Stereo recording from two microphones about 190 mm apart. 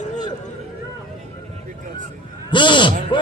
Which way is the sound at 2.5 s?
25° left (ahead or behind).